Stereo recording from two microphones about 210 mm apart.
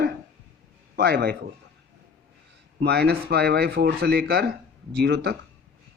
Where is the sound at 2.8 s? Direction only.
50° right (ahead or behind).